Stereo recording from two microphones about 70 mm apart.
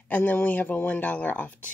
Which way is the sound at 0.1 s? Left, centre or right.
Left.